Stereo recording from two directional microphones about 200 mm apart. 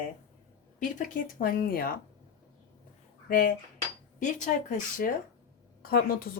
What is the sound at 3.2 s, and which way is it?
Dishes, 45° left (ahead or behind).